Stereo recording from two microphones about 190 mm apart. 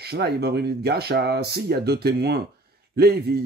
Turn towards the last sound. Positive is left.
turn(degrees=-55)  # may be behind; listen again after turning